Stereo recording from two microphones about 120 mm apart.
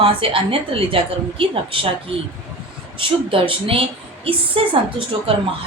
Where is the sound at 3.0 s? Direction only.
50° right (ahead or behind).